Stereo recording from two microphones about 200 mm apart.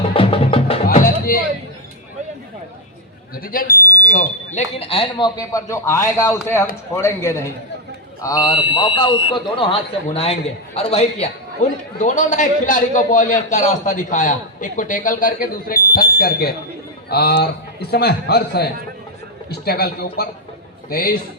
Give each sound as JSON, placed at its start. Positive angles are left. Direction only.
{"t": 0.1, "sound": "music", "side_deg": 25}
{"t": 0.9, "sound": "music", "side_deg": 50}
{"t": 3.3, "sound": "a man's voice", "side_deg": 45}